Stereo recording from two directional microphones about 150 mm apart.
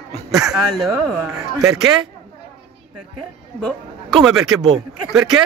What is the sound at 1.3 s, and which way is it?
Speech, 20° right (ahead or behind).